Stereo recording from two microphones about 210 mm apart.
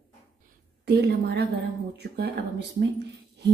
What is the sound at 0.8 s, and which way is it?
Speech, 50° right (ahead or behind).